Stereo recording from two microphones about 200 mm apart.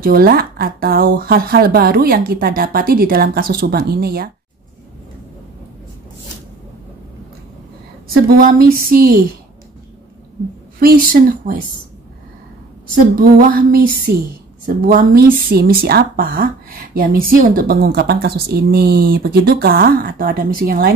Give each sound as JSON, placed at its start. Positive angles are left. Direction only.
{"t": 0.0, "sound": "speech", "side_deg": -50}
{"t": 8.3, "sound": "speech", "side_deg": -45}
{"t": 10.8, "sound": "speech", "side_deg": -45}
{"t": 13.2, "sound": "speech", "side_deg": -45}